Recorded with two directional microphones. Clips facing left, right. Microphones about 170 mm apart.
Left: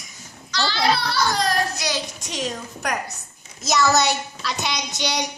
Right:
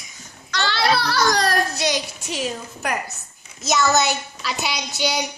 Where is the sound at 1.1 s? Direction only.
90° right.